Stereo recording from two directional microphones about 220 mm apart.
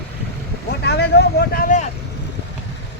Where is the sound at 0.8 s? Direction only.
50° left (ahead or behind).